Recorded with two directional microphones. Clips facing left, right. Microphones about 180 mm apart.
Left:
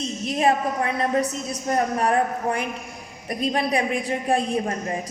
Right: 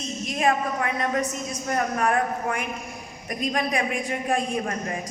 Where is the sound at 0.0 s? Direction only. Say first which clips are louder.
Left 3 dB; 30° left (ahead or behind).